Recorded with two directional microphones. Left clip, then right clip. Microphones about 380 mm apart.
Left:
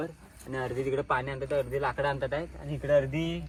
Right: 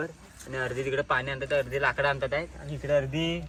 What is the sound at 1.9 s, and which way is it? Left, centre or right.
Speech, left.